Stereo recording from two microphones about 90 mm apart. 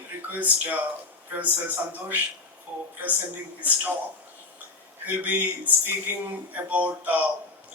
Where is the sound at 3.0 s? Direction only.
20° right (ahead or behind).